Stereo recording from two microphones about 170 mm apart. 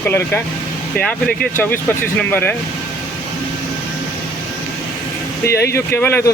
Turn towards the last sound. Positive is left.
turn(degrees=15)  # may be behind; listen again after turning